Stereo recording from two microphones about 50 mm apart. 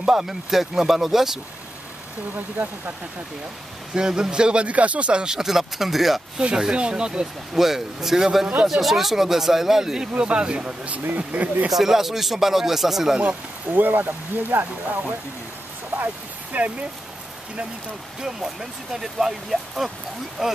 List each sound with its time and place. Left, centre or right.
0.0 s speech: centre
2.3 s speech: right
3.9 s speech: centre
5.2 s speech: centre
6.4 s speech: centre
7.5 s speech: centre
10.1 s speech: right
11.7 s speech: centre
13.7 s speech: right
16.5 s speech: right
18.2 s speech: centre